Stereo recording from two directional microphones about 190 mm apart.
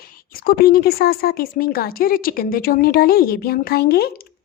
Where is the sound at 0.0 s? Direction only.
50° left (ahead or behind).